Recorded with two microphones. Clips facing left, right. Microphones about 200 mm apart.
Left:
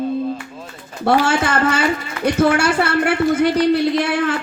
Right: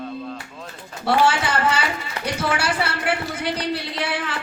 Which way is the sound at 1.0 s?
50° left (ahead or behind).